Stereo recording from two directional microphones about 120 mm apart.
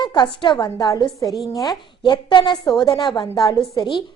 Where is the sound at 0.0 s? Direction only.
40° left (ahead or behind).